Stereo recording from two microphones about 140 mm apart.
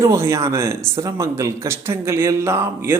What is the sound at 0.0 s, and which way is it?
Speech, 20° right (ahead or behind).